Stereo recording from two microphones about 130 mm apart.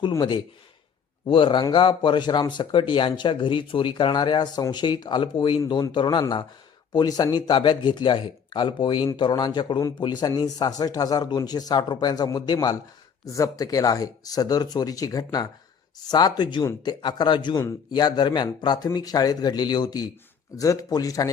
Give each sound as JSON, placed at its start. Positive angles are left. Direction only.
{"t": 0.1, "sound": "speech", "side_deg": 35}